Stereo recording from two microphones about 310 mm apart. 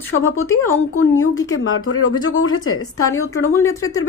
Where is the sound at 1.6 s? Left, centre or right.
Left.